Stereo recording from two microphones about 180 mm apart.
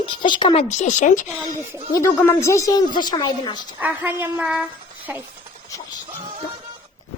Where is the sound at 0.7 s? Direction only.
40° left (ahead or behind).